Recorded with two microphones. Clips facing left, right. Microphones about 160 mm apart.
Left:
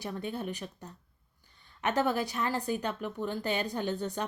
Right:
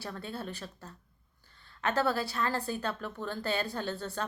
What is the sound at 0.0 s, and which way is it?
A woman's voice, 15° left (ahead or behind).